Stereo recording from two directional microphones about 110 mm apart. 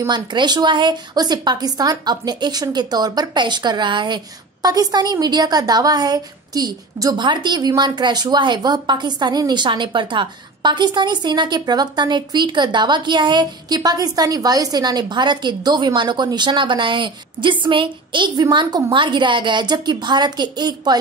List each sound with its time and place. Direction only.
0.1 s a woman's voice: 40° right (ahead or behind)